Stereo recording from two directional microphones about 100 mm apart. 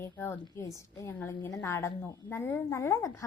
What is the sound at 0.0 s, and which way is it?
A woman's voice, 25° left (ahead or behind).